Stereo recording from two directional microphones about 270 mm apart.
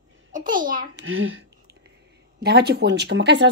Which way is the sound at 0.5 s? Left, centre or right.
Right.